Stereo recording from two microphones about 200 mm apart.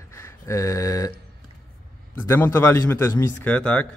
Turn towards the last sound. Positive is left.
turn(degrees=5)  # may be behind; listen again after turning